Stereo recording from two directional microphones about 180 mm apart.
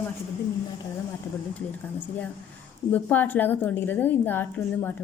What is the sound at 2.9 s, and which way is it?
A woman's voice, 10° left (ahead or behind).